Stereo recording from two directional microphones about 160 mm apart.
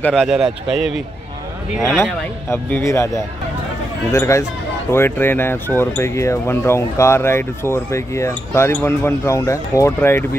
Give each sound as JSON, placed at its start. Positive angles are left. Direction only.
{"t": 0.0, "sound": "a man's voice", "side_deg": 0}
{"t": 2.5, "sound": "speech", "side_deg": 15}
{"t": 4.1, "sound": "speech", "side_deg": 15}